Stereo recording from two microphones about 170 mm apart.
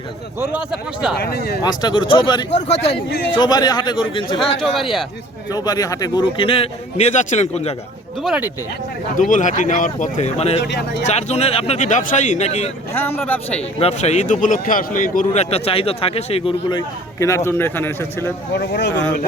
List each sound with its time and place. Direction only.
0.3 s speech: 5° right (ahead or behind)
1.2 s speech: 65° left (ahead or behind)
1.6 s a man's voice: 25° left (ahead or behind)
2.6 s a man's voice: 40° left (ahead or behind)
3.3 s a man's voice: 25° left (ahead or behind)
4.6 s speech: centre (ahead or behind)
5.5 s a man's voice: 20° left (ahead or behind); by 7.7 s 40° left (ahead or behind)
8.2 s speech: 5° right (ahead or behind)
9.1 s speech: 50° left (ahead or behind)
10.6 s speech: 85° left
11.0 s a man's voice: 40° left (ahead or behind)
12.9 s speech: 10° left (ahead or behind)
13.7 s a man's voice: 40° left (ahead or behind); by 18.3 s 10° left (ahead or behind)
18.5 s speech: 70° left (ahead or behind)